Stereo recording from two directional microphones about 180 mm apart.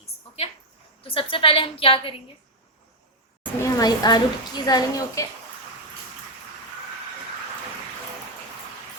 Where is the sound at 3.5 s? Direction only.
20° left (ahead or behind).